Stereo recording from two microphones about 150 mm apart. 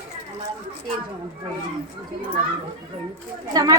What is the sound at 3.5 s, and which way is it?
Speech, 25° right (ahead or behind).